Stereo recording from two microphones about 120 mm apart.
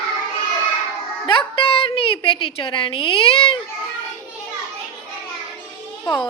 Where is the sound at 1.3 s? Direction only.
45° left (ahead or behind).